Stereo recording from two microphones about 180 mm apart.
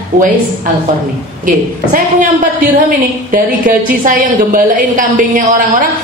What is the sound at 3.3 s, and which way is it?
A woman's voice, 50° right (ahead or behind).